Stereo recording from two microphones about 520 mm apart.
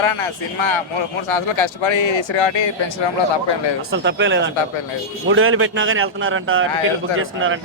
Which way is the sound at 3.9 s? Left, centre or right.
Right.